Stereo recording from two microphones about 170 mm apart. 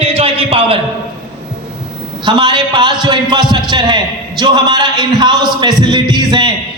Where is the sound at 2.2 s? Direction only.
25° right (ahead or behind).